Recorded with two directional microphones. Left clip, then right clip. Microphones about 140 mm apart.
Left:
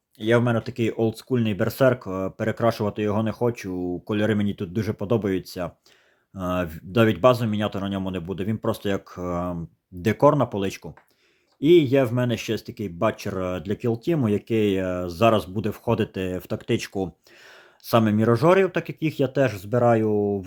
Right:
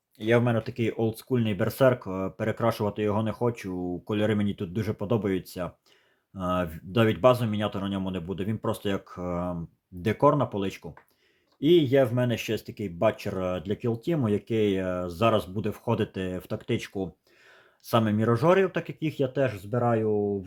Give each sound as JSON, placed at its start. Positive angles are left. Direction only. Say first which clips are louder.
{"t": 0.2, "sound": "speech", "louder": "left 3 dB", "side_deg": 20}